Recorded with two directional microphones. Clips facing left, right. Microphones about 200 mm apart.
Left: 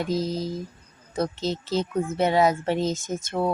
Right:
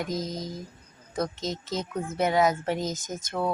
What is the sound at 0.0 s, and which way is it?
Speech, 30° left (ahead or behind).